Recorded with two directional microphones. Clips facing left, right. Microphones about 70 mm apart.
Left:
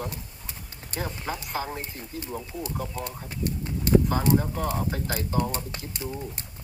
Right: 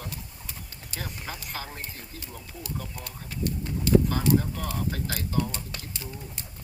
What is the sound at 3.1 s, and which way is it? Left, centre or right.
Speech, left.